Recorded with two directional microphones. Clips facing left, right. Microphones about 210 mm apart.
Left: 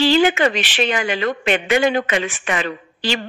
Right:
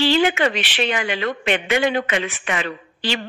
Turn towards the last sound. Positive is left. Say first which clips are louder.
# left 2 dB
turn(degrees=40)  # may be behind; listen again after turning